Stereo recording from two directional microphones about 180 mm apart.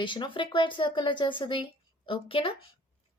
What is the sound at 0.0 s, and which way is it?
Speech, 25° left (ahead or behind).